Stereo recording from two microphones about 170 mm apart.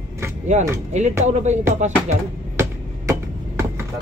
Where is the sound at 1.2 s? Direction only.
45° right (ahead or behind).